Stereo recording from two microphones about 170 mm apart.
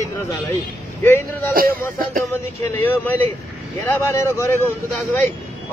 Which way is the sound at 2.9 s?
10° left (ahead or behind).